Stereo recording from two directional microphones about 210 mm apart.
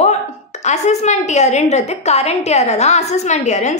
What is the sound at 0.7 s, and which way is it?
A woman's voice, 35° left (ahead or behind).